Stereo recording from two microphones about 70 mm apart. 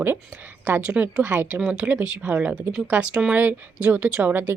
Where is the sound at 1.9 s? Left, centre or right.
Right.